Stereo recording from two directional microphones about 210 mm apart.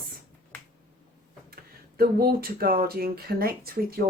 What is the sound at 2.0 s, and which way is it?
Speech, 45° right (ahead or behind).